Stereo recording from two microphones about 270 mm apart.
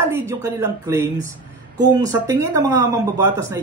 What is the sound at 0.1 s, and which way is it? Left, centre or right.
A man's voice, centre.